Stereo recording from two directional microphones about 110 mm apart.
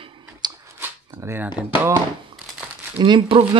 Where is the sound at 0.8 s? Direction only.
20° right (ahead or behind).